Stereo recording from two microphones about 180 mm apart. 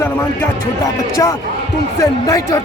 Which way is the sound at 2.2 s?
20° left (ahead or behind).